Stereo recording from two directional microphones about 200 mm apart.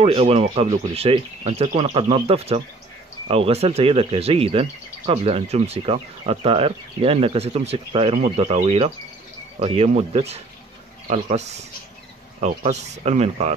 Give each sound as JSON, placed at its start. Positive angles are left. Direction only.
{"t": 0.0, "sound": "speech", "side_deg": -30}